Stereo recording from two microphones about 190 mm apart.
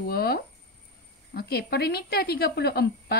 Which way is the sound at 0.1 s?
55° left (ahead or behind).